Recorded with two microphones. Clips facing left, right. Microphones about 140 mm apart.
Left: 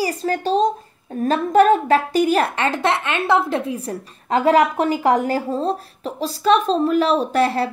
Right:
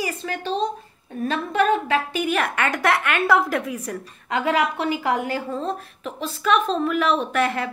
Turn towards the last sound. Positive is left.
turn(degrees=35)  # may be behind; listen again after turning